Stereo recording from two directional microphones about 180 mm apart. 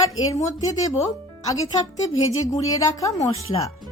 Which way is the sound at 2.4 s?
20° left (ahead or behind).